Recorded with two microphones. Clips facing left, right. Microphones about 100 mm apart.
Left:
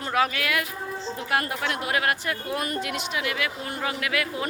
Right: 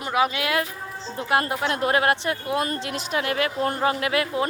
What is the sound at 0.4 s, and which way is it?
Speech, 30° right (ahead or behind).